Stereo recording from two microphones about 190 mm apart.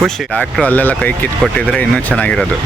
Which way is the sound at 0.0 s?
5° left (ahead or behind).